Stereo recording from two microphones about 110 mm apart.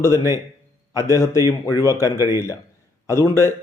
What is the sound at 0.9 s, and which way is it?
A man's voice, 30° left (ahead or behind).